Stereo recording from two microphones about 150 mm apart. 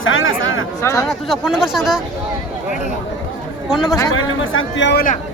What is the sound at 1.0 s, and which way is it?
Speech, centre (ahead or behind).